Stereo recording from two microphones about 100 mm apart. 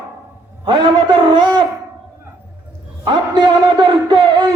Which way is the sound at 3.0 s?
50° right (ahead or behind).